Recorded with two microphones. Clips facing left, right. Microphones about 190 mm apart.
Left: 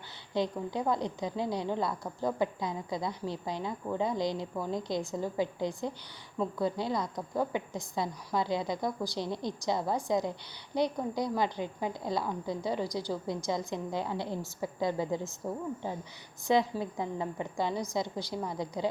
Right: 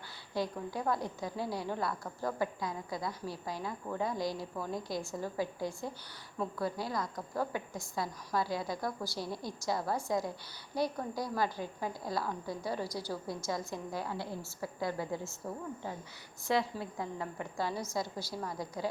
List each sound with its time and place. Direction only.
0.3 s a woman's voice: 20° left (ahead or behind)
16.5 s a woman's voice: 20° left (ahead or behind)